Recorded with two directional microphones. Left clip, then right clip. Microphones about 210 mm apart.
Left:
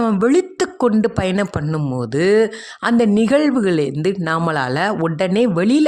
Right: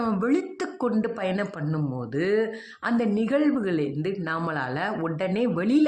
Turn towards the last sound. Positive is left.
turn(degrees=55)  # may be behind; listen again after turning